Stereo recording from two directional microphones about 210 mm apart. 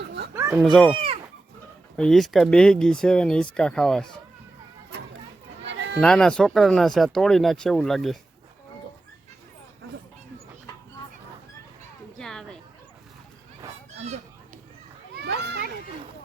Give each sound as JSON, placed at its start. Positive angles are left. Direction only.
{"t": 0.3, "sound": "chicken", "side_deg": -10}
{"t": 0.6, "sound": "speech", "side_deg": 0}
{"t": 2.0, "sound": "speech", "side_deg": 0}
{"t": 5.6, "sound": "sheep", "side_deg": -55}
{"t": 6.0, "sound": "speech", "side_deg": 5}
{"t": 12.2, "sound": "a sound", "side_deg": 5}
{"t": 15.2, "sound": "children playing", "side_deg": -55}